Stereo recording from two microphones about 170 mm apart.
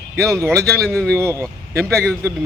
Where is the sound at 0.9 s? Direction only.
5° left (ahead or behind).